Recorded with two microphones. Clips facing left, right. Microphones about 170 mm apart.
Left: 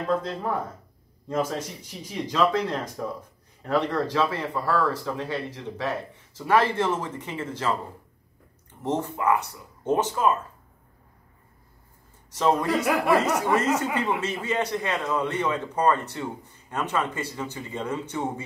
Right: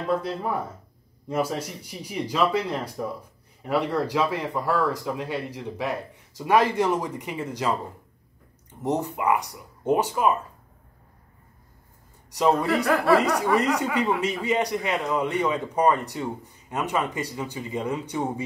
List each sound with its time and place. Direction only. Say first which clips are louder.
0.0 s a man's voice: even; 10° right (ahead or behind)
8.8 s a man's voice: right 1 dB; 15° right (ahead or behind)
12.3 s a man's voice: right 1 dB; 15° right (ahead or behind)
12.8 s speech: right 2 dB; 15° left (ahead or behind)
13.2 s a man's voice: right 1 dB; 15° right (ahead or behind)